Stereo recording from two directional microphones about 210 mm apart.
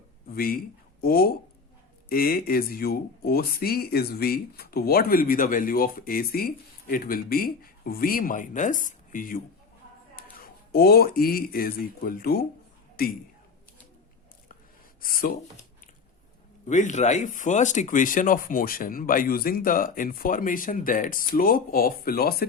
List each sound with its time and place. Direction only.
0.3 s speech: 45° left (ahead or behind)
15.0 s speech: 45° left (ahead or behind)
16.6 s speech: 35° left (ahead or behind)